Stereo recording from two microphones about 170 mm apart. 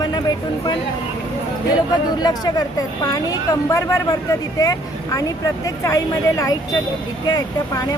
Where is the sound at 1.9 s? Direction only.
25° left (ahead or behind).